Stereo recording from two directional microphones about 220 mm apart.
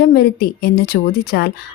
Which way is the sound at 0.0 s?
45° left (ahead or behind).